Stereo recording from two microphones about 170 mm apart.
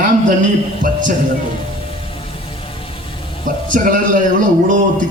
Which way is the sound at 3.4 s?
50° right (ahead or behind).